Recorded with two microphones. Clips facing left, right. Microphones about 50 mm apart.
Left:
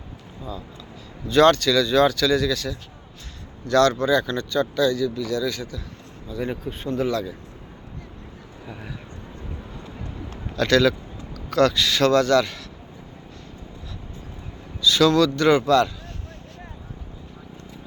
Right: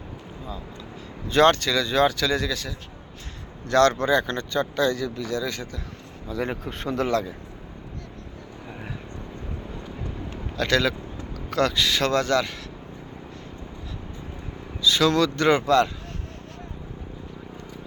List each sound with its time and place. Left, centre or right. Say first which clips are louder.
1.3 s speech: left 2 dB; right
3.7 s speech: left 1 dB; right
6.2 s speech: even; right
10.6 s speech: left 4 dB; centre
14.8 s a sound: left 3 dB; right
15.1 s speech: left 3 dB; right